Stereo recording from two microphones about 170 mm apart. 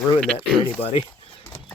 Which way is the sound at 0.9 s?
30° left (ahead or behind).